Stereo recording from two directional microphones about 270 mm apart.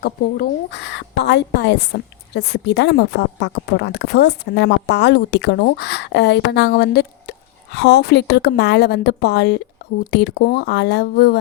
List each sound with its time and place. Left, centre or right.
0.0 s a woman's voice: left